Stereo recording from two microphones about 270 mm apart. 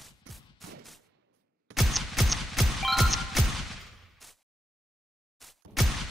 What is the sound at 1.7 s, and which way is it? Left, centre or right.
Music, centre.